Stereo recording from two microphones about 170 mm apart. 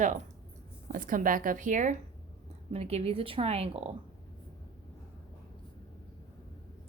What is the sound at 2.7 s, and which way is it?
A woman's voice, 35° right (ahead or behind).